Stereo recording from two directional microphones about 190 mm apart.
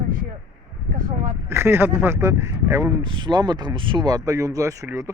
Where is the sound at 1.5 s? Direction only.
10° right (ahead or behind).